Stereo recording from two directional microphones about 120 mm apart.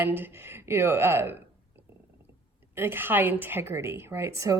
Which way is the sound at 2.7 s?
20° right (ahead or behind).